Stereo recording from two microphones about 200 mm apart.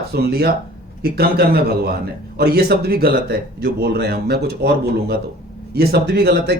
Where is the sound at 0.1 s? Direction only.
50° right (ahead or behind).